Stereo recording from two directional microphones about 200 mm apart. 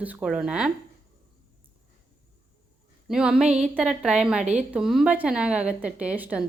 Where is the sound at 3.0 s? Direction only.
Centre (ahead or behind).